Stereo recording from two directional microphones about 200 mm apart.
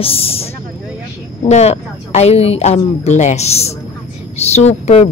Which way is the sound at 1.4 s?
35° left (ahead or behind).